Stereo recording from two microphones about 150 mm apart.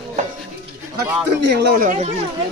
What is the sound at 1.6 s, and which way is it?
Speech, 80° right.